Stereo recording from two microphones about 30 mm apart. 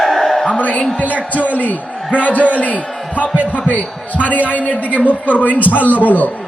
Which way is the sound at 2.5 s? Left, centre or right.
Left.